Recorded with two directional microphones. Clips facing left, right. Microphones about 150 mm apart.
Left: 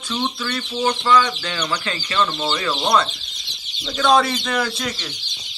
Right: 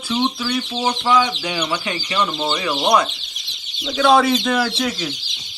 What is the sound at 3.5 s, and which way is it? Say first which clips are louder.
Chicken: even; 30° left (ahead or behind).